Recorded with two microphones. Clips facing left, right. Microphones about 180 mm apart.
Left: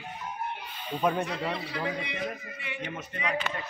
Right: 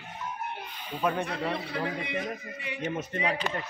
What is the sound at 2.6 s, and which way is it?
Speech, 35° right (ahead or behind).